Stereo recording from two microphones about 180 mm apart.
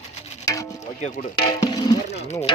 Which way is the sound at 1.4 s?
20° left (ahead or behind).